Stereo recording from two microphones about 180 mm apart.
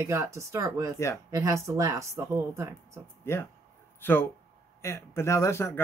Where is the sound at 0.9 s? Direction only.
15° left (ahead or behind).